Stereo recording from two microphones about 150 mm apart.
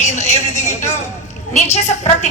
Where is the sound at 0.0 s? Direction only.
50° left (ahead or behind).